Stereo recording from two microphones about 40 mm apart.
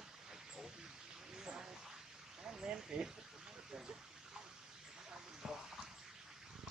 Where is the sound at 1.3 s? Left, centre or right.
Centre.